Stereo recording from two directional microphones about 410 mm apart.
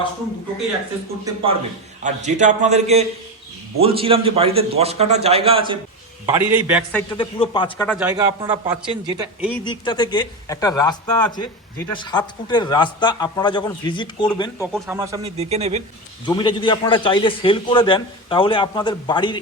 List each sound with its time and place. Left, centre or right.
1.2 s a man's voice: centre
7.1 s speech: centre
9.5 s speech: centre
14.8 s a man's voice: centre
16.2 s speech: centre